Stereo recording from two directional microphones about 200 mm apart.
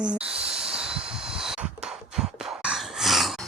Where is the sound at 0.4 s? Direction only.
5° right (ahead or behind).